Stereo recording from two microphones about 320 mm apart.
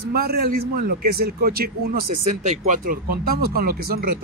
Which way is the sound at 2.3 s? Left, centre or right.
Right.